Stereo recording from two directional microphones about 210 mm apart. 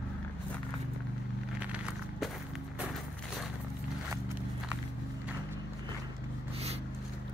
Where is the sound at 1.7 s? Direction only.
5° right (ahead or behind).